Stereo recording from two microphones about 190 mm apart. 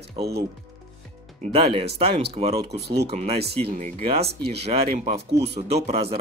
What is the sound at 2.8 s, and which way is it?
Speech, 60° right (ahead or behind).